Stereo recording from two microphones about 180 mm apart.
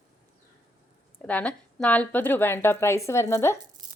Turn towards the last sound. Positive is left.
turn(degrees=-25)  # may be behind; listen again after turning